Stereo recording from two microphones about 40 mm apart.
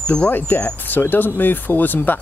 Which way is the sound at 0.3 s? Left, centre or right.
Left.